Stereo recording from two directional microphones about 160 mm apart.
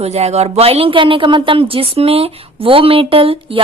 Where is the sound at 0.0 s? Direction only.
40° right (ahead or behind).